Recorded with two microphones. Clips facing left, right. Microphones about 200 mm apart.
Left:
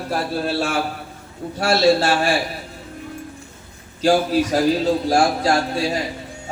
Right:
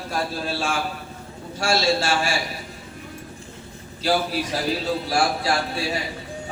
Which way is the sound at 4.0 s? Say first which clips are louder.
Left 6 dB; 45° left (ahead or behind).